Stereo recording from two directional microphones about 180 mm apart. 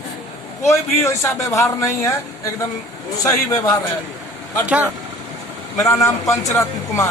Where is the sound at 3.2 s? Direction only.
20° left (ahead or behind).